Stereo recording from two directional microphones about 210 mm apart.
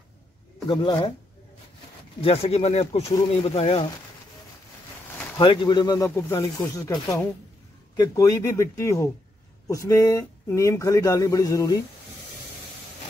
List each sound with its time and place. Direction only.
0.7 s speech: 20° left (ahead or behind)
2.2 s speech: 30° left (ahead or behind)
5.4 s speech: 20° left (ahead or behind)